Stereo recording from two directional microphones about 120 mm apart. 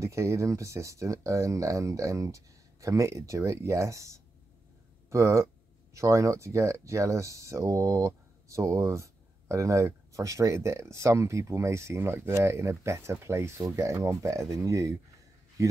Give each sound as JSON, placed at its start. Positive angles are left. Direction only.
{"t": 0.0, "sound": "speech", "side_deg": -25}